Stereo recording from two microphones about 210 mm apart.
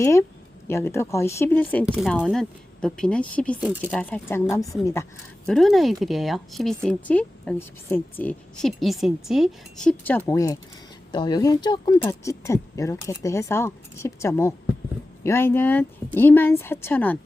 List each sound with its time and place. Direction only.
0.0 s speech: 15° left (ahead or behind)
1.8 s speech: 5° right (ahead or behind)
3.6 s speech: 5° right (ahead or behind)
3.9 s speech: 5° left (ahead or behind)
5.5 s speech: centre (ahead or behind)